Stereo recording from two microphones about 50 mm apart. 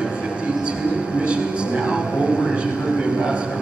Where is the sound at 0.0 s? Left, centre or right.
Right.